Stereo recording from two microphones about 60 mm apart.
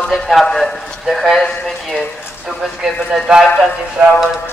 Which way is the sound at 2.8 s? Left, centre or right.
Centre.